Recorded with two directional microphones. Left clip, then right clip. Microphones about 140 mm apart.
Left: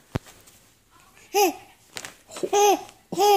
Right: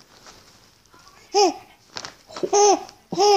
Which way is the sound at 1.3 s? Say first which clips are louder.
Right 3 dB; 20° left (ahead or behind).